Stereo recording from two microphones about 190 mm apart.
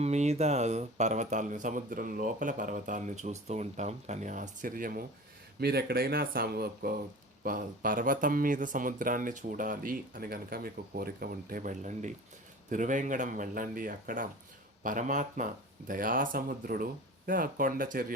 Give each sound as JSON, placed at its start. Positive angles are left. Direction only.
{"t": 0.0, "sound": "speech", "side_deg": -35}